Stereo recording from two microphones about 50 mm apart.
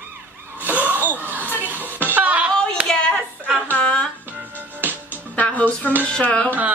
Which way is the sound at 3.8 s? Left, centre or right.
Left.